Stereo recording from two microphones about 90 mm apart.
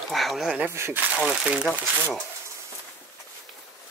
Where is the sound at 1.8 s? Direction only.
20° right (ahead or behind).